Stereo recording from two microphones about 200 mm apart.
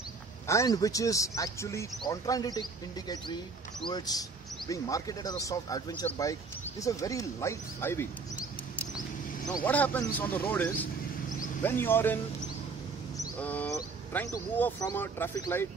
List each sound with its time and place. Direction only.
0.5 s speech: 15° left (ahead or behind)
3.8 s speech: 20° left (ahead or behind)
9.7 s speech: 10° left (ahead or behind)
13.2 s a sound: 10° left (ahead or behind)
13.7 s speech: 15° left (ahead or behind)